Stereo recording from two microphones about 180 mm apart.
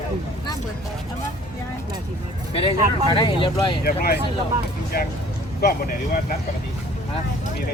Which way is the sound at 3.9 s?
60° left (ahead or behind).